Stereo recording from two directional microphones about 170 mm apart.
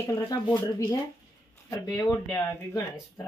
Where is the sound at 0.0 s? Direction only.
20° left (ahead or behind).